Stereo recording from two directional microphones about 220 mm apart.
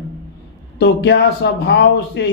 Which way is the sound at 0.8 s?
50° left (ahead or behind).